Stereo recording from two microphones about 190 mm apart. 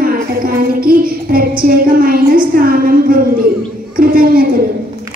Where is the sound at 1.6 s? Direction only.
50° right (ahead or behind).